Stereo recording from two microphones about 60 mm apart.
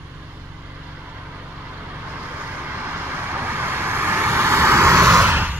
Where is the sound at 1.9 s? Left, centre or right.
Right.